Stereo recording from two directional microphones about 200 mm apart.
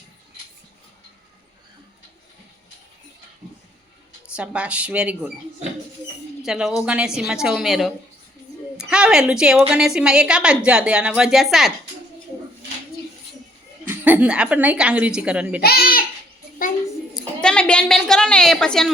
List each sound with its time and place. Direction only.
4.4 s a woman's voice: 5° right (ahead or behind)
6.4 s a woman's voice: centre (ahead or behind)
13.8 s a woman's voice: 10° right (ahead or behind)
15.6 s a child's voice: 50° left (ahead or behind)
17.2 s a sound: 5° left (ahead or behind)